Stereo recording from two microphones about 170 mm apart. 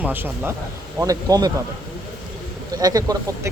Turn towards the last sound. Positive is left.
turn(degrees=-20)  # may be behind; listen again after turning